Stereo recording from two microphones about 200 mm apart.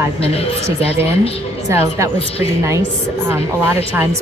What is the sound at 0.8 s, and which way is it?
Speech, 30° left (ahead or behind).